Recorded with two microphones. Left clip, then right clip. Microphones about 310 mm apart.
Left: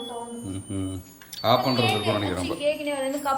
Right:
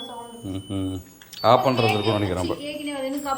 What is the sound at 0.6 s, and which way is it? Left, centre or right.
Speech, centre.